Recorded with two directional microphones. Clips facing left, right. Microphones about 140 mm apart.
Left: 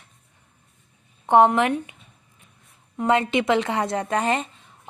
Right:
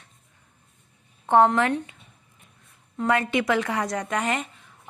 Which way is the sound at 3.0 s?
25° left (ahead or behind).